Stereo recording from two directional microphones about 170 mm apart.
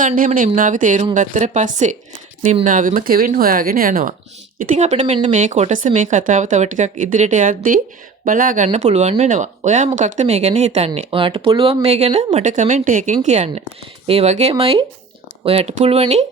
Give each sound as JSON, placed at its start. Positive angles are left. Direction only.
{"t": 0.0, "sound": "speech", "side_deg": -50}